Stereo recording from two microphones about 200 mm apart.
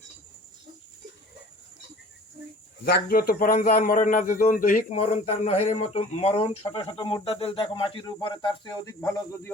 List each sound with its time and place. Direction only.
2.8 s a man's voice: 50° left (ahead or behind); by 9.5 s 15° left (ahead or behind)